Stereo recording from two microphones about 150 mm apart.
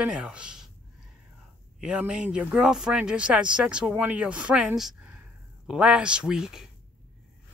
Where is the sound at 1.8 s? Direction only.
5° right (ahead or behind).